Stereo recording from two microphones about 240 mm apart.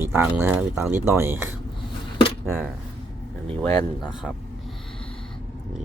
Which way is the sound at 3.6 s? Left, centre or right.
Centre.